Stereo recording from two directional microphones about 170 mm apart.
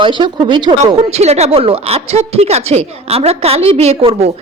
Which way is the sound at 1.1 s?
40° right (ahead or behind).